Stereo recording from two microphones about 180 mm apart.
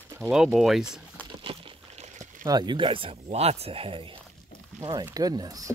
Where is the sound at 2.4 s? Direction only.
20° right (ahead or behind).